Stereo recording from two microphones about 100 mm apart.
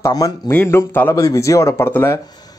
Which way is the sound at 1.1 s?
35° left (ahead or behind).